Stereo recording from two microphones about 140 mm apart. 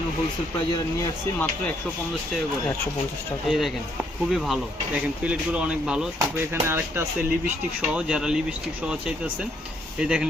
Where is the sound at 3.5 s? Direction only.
Centre (ahead or behind); by 7.1 s 15° right (ahead or behind).